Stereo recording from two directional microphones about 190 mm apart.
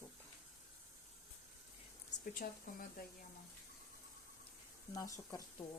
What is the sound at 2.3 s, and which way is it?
Speech, 50° left (ahead or behind).